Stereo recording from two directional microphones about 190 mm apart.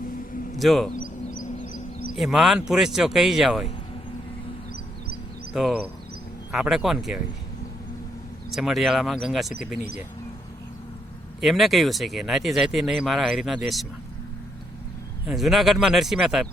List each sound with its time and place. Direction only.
0.5 s a man's voice: centre (ahead or behind)
0.9 s a sound: 45° left (ahead or behind)
2.1 s speech: centre (ahead or behind)
5.5 s speech: 5° right (ahead or behind)
8.4 s speech: centre (ahead or behind)
11.3 s speech: centre (ahead or behind)
15.3 s speech: centre (ahead or behind)